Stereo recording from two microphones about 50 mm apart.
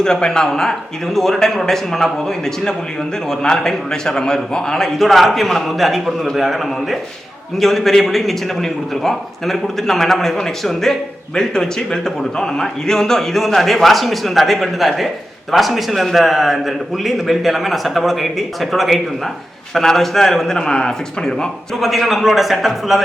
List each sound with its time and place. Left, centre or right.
0.0 s a man's voice: centre
21.8 s a man's voice: centre